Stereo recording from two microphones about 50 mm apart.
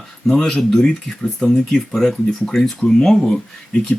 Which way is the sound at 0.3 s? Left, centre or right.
Centre.